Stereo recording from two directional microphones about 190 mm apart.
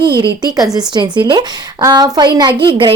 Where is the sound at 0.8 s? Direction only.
20° right (ahead or behind).